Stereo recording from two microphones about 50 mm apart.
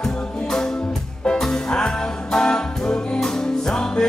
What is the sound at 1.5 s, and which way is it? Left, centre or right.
Music, centre.